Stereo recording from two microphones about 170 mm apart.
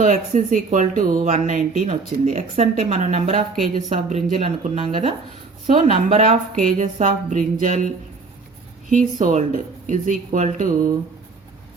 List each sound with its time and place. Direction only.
0.0 s speech: 50° right (ahead or behind)
8.9 s speech: 50° right (ahead or behind)